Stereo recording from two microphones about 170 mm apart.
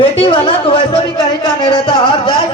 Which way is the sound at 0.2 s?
30° left (ahead or behind).